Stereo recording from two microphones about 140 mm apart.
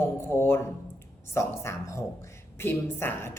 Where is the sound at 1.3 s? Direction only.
20° left (ahead or behind).